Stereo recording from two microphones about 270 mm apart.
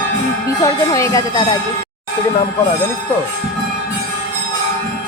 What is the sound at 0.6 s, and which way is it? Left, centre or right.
Speech, centre.